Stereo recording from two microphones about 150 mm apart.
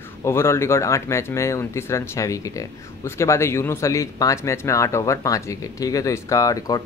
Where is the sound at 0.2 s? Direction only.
15° left (ahead or behind).